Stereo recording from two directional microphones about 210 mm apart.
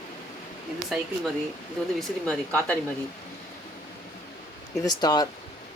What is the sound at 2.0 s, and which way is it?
Speech, 5° left (ahead or behind).